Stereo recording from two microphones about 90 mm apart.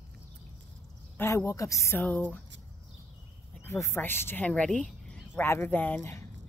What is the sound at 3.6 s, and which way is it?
Speech, 30° left (ahead or behind).